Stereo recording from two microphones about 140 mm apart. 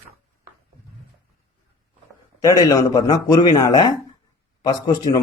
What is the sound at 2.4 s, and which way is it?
Speech, 25° left (ahead or behind).